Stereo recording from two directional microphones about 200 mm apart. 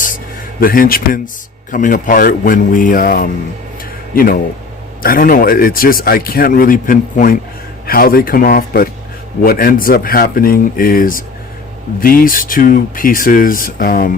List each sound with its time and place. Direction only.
0.6 s speech: 45° left (ahead or behind)